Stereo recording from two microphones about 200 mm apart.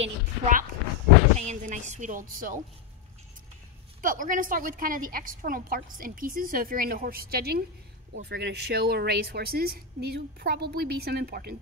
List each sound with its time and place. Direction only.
0.0 s speech: 40° right (ahead or behind)
4.0 s a woman's voice: 40° right (ahead or behind)